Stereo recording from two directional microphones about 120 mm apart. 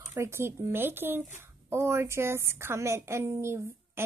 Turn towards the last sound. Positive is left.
turn(degrees=-20)  # may be behind; listen again after turning